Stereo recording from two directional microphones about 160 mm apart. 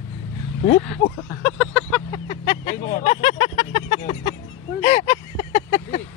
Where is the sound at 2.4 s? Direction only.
60° left (ahead or behind).